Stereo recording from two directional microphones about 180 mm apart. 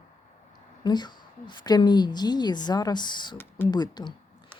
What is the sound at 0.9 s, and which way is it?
Speech, 25° left (ahead or behind).